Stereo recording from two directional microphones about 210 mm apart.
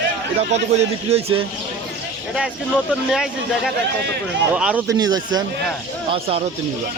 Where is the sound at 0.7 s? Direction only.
30° right (ahead or behind).